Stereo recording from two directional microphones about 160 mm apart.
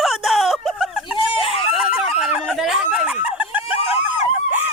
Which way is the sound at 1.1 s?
35° left (ahead or behind).